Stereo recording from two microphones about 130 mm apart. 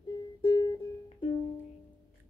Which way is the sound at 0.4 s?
35° left (ahead or behind).